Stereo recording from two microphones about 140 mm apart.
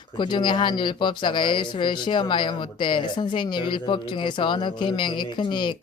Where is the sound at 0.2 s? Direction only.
35° left (ahead or behind).